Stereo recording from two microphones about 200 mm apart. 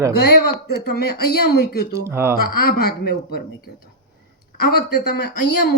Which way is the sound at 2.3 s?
45° left (ahead or behind).